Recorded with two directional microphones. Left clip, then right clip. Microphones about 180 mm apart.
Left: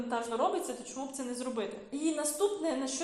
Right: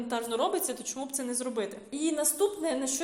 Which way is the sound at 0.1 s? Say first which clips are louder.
Right 2 dB; 40° right (ahead or behind).